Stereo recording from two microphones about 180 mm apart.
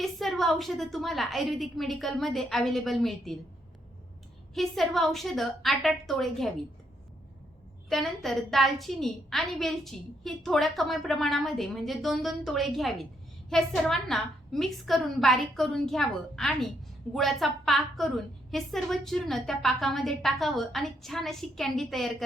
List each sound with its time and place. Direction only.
0.0 s a woman's voice: centre (ahead or behind)
4.5 s a woman's voice: centre (ahead or behind)
7.9 s a woman's voice: centre (ahead or behind)